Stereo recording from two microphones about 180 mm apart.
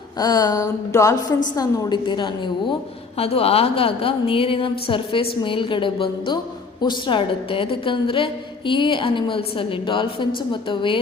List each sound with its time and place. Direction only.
0.2 s a woman's voice: 20° left (ahead or behind)